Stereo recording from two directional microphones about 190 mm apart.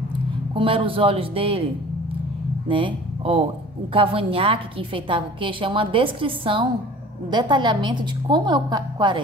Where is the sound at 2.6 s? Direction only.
25° right (ahead or behind).